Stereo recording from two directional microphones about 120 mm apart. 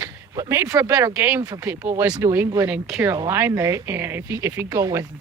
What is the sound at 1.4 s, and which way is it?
Speech, 30° right (ahead or behind).